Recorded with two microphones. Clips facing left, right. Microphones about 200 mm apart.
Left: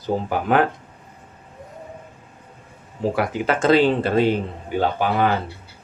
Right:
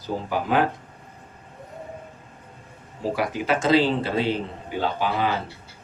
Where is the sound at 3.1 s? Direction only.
55° left (ahead or behind).